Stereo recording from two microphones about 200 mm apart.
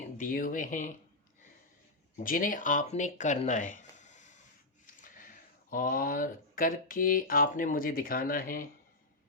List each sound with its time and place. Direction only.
0.2 s speech: 45° left (ahead or behind)
2.1 s speech: 45° left (ahead or behind)
5.0 s a sound: 40° left (ahead or behind)
5.7 s speech: 45° left (ahead or behind)